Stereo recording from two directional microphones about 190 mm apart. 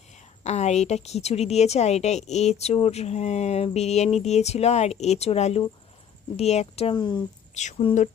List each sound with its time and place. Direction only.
0.4 s a woman's voice: 35° left (ahead or behind)
6.9 s speech: 20° left (ahead or behind)
7.5 s a woman's voice: 40° left (ahead or behind)